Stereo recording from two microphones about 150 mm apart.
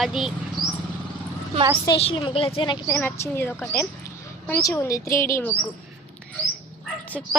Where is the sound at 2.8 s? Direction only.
15° left (ahead or behind).